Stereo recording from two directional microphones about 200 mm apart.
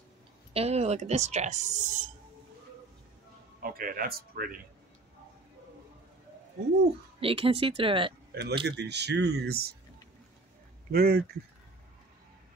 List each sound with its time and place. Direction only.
0.5 s speech: 30° right (ahead or behind)
3.6 s speech: 45° right (ahead or behind)
7.2 s speech: 30° right (ahead or behind)
8.3 s speech: 50° right (ahead or behind)
10.9 s speech: 50° right (ahead or behind)